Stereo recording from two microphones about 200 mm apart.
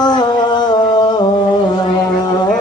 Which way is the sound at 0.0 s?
20° left (ahead or behind).